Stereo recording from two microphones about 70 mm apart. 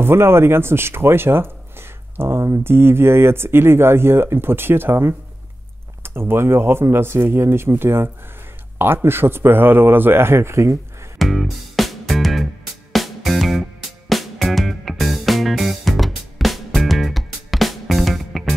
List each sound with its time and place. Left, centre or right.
0.0 s speech: right
11.1 s music: centre